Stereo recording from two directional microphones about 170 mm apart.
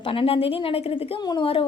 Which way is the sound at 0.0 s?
30° left (ahead or behind).